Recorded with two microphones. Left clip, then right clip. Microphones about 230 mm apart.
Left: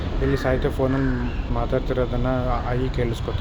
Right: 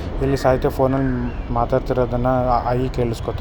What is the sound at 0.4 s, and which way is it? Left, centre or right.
Speech, right.